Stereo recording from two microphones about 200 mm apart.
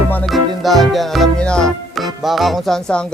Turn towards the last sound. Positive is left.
turn(degrees=5)  # may be behind; listen again after turning